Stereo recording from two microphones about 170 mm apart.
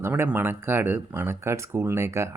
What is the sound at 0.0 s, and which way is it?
Speech, 10° right (ahead or behind).